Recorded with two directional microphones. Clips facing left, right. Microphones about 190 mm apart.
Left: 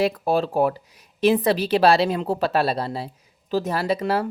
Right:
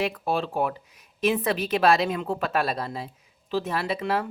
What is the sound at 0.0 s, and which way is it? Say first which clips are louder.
A woman's voice: left 5 dB; 40° left (ahead or behind).